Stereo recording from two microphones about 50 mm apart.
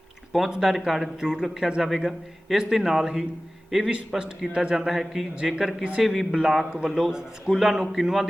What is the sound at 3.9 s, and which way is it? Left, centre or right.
Speech, centre.